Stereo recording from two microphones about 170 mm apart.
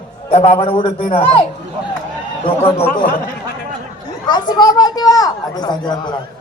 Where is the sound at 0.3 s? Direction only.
35° left (ahead or behind).